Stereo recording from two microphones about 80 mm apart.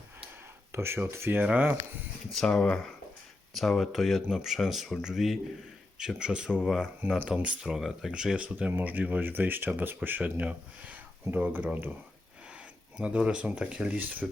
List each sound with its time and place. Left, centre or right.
0.7 s speech: right
2.3 s speech: centre
7.0 s speech: right
7.4 s speech: centre
13.0 s speech: centre